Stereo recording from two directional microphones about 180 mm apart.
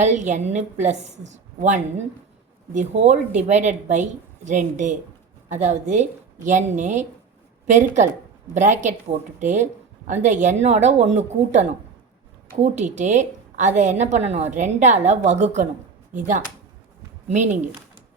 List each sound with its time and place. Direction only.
0.0 s a woman's voice: 40° right (ahead or behind)
17.2 s a woman's voice: 40° right (ahead or behind)